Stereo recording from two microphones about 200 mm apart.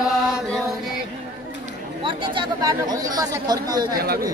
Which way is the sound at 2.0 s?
25° right (ahead or behind).